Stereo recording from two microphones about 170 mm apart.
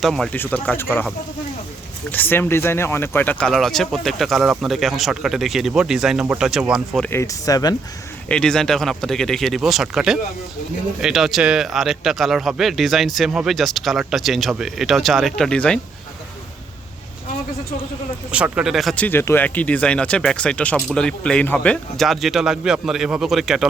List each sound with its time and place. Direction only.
0.0 s speech: centre (ahead or behind)
2.0 s speech: 10° left (ahead or behind)
7.0 s speech: 15° left (ahead or behind)
8.3 s speech: 5° left (ahead or behind)
18.3 s speech: 5° right (ahead or behind)